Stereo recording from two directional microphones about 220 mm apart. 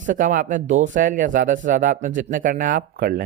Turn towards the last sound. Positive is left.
turn(degrees=-40)  # may be behind; listen again after turning